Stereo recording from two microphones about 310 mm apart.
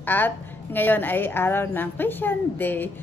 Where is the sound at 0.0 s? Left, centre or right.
Centre.